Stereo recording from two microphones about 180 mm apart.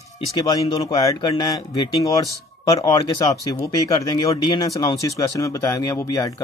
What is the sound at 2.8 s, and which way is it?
Speech, 20° left (ahead or behind).